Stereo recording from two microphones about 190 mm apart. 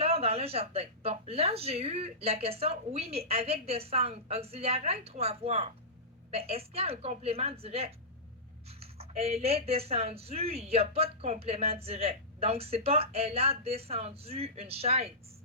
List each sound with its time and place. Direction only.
0.0 s speech: 30° right (ahead or behind)